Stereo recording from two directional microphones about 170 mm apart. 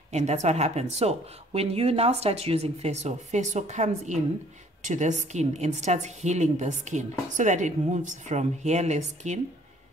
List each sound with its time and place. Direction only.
0.1 s a woman's voice: 40° right (ahead or behind)